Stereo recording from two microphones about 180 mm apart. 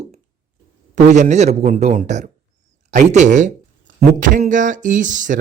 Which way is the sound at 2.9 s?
45° right (ahead or behind).